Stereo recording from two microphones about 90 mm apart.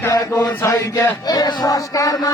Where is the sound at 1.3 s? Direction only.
45° left (ahead or behind).